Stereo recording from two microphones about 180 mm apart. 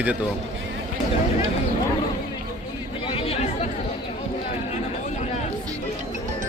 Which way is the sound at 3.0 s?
30° left (ahead or behind).